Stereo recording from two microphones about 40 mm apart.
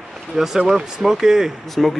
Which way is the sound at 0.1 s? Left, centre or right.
Centre.